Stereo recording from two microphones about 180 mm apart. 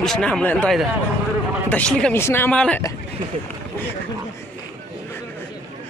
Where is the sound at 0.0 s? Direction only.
5° left (ahead or behind).